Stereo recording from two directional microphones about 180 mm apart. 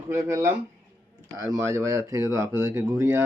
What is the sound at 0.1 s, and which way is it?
A man's voice, 15° right (ahead or behind).